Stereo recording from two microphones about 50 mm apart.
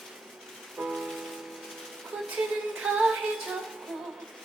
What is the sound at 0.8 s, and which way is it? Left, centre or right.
Music, centre.